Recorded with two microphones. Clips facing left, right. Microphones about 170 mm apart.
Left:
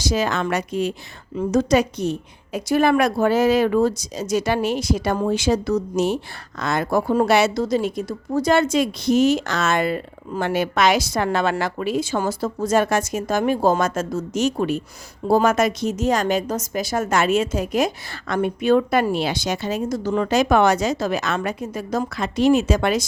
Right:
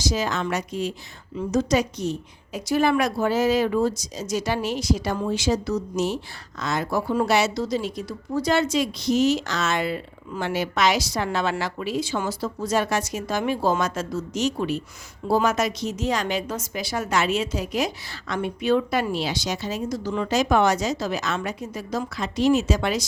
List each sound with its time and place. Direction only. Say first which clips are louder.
0.0 s a woman's voice: left 3 dB; 60° left (ahead or behind)